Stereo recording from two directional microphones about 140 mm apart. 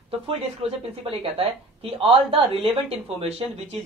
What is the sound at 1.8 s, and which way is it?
A man's voice, 40° right (ahead or behind).